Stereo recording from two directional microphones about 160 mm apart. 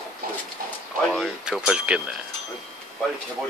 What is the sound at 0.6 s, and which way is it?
Speech, 60° right (ahead or behind).